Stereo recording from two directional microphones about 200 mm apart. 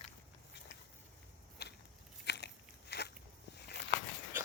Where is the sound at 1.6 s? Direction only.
55° left (ahead or behind).